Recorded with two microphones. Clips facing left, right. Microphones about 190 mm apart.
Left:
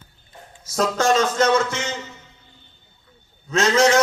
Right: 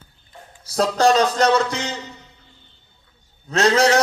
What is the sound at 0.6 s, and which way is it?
A man's voice, 35° right (ahead or behind).